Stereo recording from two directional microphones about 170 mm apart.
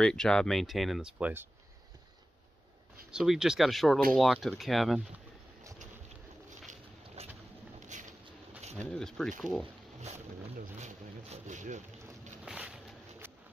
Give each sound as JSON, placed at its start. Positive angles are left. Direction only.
{"t": 0.0, "sound": "speech", "side_deg": 5}
{"t": 3.1, "sound": "speech", "side_deg": -5}
{"t": 7.2, "sound": "a sound", "side_deg": -40}
{"t": 8.8, "sound": "speech", "side_deg": 5}
{"t": 10.6, "sound": "speech", "side_deg": -40}
{"t": 12.4, "sound": "a sound", "side_deg": -5}